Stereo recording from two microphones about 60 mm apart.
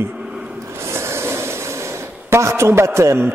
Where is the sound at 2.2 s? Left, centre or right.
Right.